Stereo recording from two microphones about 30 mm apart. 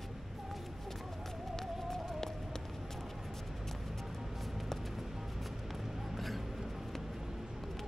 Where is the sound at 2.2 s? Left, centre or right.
Centre.